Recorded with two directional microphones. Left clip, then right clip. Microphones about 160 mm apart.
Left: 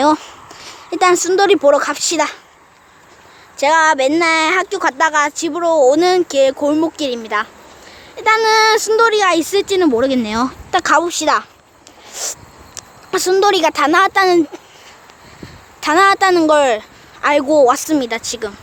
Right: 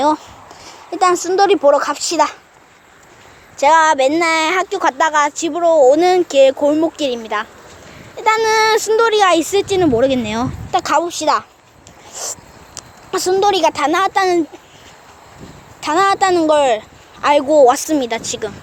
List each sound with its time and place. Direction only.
0.4 s a woman's voice: 20° left (ahead or behind)
3.6 s speech: 15° left (ahead or behind)
12.1 s a sound: 20° left (ahead or behind)
13.1 s a woman's voice: 20° left (ahead or behind)
15.8 s speech: 20° left (ahead or behind)
17.7 s speech: 5° left (ahead or behind)